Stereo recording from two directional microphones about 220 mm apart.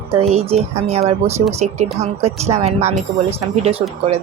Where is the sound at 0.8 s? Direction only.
30° right (ahead or behind).